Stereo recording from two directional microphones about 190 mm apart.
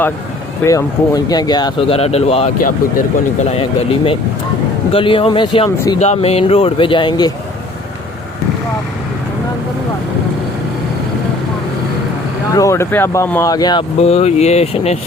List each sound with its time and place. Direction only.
0.6 s speech: 15° left (ahead or behind); by 2.5 s 30° left (ahead or behind)
3.5 s speech: 30° left (ahead or behind)
5.7 s speech: 15° left (ahead or behind)
6.0 s speech: 35° left (ahead or behind)
12.5 s speech: 15° left (ahead or behind)
14.0 s speech: 35° left (ahead or behind)